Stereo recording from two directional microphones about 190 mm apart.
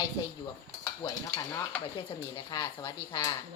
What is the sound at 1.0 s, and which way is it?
Stir, 15° left (ahead or behind).